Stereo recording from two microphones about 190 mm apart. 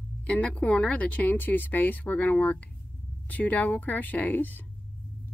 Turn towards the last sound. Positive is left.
turn(degrees=10)  # may be behind; listen again after turning